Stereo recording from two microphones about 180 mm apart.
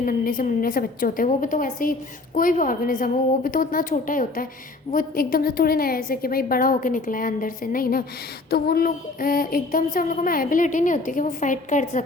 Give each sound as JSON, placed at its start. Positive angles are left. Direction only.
{"t": 0.0, "sound": "a woman's voice", "side_deg": 50}